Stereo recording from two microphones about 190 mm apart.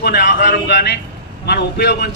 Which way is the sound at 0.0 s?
50° left (ahead or behind).